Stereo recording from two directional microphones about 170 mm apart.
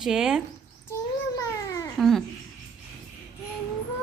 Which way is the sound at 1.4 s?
20° left (ahead or behind).